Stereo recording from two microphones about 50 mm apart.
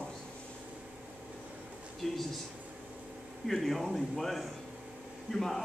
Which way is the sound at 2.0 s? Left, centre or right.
Centre.